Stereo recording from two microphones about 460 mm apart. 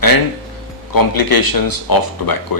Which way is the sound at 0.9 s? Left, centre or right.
Left.